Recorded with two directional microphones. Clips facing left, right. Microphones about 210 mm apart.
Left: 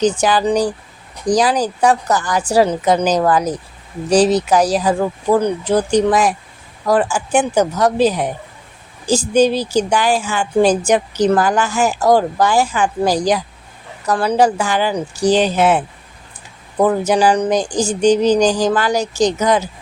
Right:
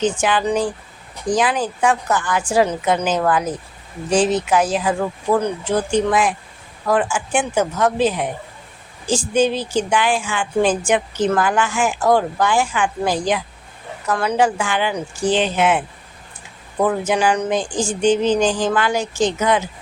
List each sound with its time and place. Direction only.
0.0 s a woman's voice: 35° left (ahead or behind)
16.8 s a woman's voice: 40° left (ahead or behind)